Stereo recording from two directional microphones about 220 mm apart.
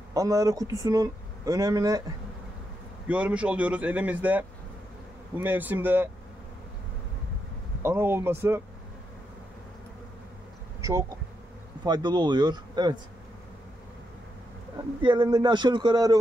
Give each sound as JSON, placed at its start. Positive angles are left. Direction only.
{"t": 0.1, "sound": "a man's voice", "side_deg": -15}
{"t": 3.1, "sound": "a man's voice", "side_deg": -5}
{"t": 7.8, "sound": "a man's voice", "side_deg": -10}
{"t": 10.8, "sound": "bee", "side_deg": -15}
{"t": 11.8, "sound": "a man's voice", "side_deg": -20}
{"t": 15.0, "sound": "a man's voice", "side_deg": -20}